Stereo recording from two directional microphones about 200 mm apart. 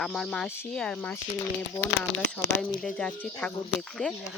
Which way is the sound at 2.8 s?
5° left (ahead or behind).